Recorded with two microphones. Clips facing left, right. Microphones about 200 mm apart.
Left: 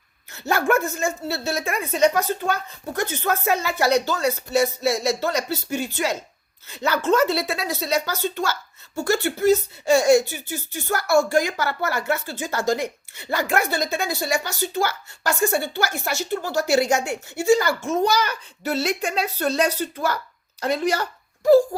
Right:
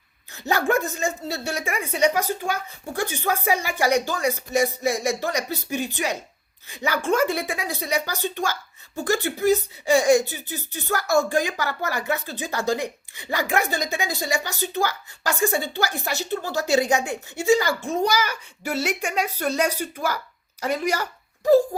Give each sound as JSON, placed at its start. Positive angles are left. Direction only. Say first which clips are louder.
{"t": 0.3, "sound": "speech", "louder": "left 1 dB", "side_deg": -15}